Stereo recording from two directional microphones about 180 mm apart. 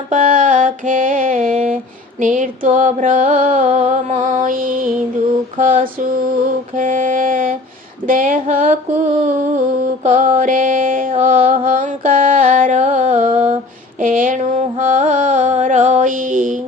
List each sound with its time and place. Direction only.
0.1 s mantra: 50° right (ahead or behind)
14.0 s music: 50° right (ahead or behind)